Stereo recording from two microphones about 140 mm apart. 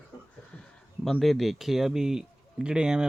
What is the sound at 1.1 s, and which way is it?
Speech, centre (ahead or behind).